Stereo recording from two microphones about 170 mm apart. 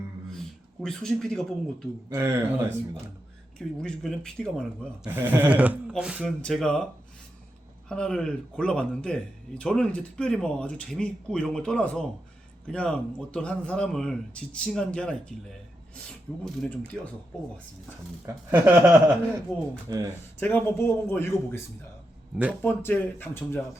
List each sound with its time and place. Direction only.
0.8 s speech: 5° left (ahead or behind)
2.0 s speech: 15° right (ahead or behind)
3.6 s speech: 5° left (ahead or behind)
5.0 s speech: 10° right (ahead or behind)
7.9 s speech: 5° left (ahead or behind)
16.4 s a man's voice: 5° left (ahead or behind)
18.3 s speech: 10° right (ahead or behind)
20.4 s a man's voice: 10° left (ahead or behind)
22.6 s a man's voice: 10° left (ahead or behind)